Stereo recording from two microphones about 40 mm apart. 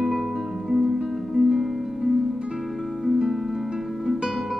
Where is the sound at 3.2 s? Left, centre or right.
Centre.